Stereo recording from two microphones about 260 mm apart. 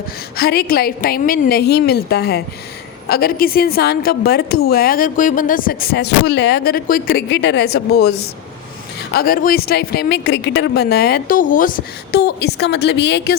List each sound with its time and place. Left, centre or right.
0.3 s a woman's voice: left